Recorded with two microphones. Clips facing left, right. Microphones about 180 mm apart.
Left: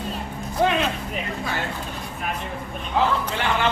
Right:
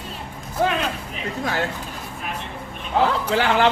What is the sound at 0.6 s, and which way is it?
Speech, centre (ahead or behind).